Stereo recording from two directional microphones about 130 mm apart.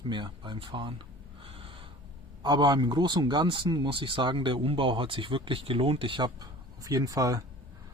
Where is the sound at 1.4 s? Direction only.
45° right (ahead or behind).